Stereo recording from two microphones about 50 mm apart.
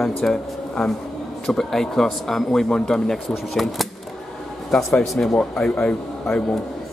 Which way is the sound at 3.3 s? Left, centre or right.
Centre.